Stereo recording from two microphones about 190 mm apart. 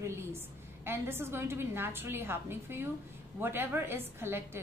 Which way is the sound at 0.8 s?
10° right (ahead or behind).